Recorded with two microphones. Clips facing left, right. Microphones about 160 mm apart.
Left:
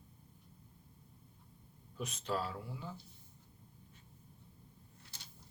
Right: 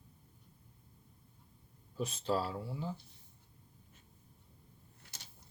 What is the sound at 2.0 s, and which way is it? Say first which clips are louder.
Speech: right 4 dB; 30° right (ahead or behind).